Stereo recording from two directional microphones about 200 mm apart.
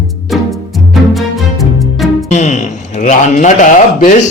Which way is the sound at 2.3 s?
35° left (ahead or behind).